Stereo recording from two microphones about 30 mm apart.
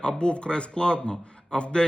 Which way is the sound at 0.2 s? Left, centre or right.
Left.